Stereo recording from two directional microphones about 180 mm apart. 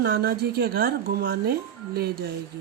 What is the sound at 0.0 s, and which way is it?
Speech, 55° right (ahead or behind).